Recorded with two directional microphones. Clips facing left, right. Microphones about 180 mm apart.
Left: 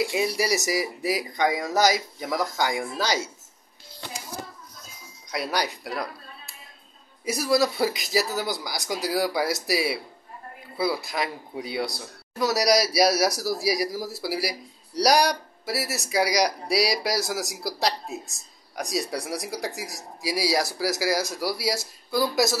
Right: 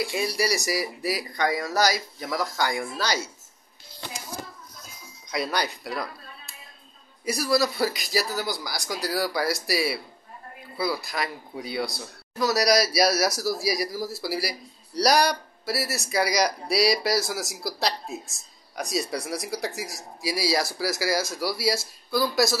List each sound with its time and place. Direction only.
0.0 s speech: 20° left (ahead or behind)
5.3 s speech: 10° left (ahead or behind)
7.3 s speech: 20° left (ahead or behind)